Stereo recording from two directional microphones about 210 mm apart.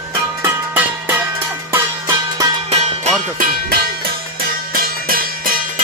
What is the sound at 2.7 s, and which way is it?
Music, 30° right (ahead or behind).